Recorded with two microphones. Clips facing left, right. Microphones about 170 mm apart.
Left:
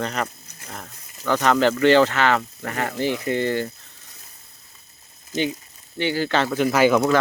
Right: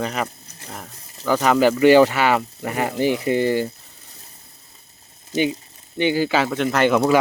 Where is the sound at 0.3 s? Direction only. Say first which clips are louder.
Right 2 dB; 30° right (ahead or behind).